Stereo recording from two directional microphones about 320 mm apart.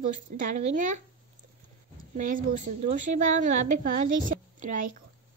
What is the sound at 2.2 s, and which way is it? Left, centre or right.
Speech, right.